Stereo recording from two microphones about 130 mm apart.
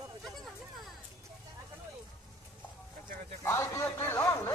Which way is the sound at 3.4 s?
20° left (ahead or behind).